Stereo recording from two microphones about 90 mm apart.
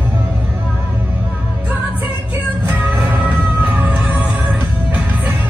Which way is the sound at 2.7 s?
20° right (ahead or behind).